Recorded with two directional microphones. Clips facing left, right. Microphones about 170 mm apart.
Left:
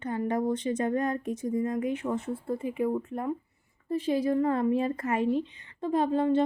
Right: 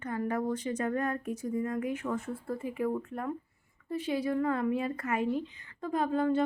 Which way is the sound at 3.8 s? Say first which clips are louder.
Left 5 dB; 35° left (ahead or behind).